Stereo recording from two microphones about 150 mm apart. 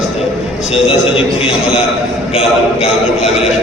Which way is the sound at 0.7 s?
40° left (ahead or behind).